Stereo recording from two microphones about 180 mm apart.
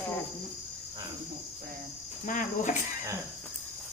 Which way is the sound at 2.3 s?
45° left (ahead or behind).